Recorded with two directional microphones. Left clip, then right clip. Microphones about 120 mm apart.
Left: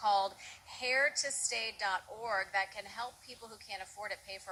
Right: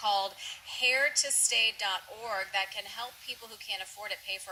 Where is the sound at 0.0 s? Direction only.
20° right (ahead or behind).